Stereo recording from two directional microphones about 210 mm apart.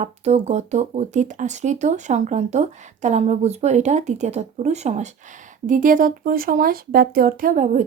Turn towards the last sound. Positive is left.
turn(degrees=-35)  # may be behind; listen again after turning